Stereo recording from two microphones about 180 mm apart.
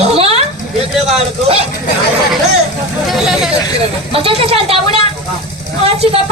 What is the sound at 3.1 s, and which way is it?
Speech, centre (ahead or behind).